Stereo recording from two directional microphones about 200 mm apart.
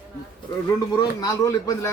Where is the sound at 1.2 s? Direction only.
15° left (ahead or behind).